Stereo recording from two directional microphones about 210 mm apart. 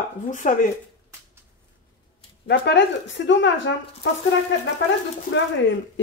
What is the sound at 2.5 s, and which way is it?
Speech, 55° left (ahead or behind).